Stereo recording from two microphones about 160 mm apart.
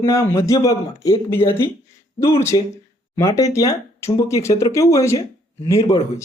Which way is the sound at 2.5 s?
25° left (ahead or behind).